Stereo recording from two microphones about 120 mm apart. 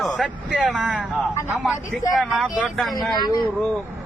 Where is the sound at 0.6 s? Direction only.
10° right (ahead or behind).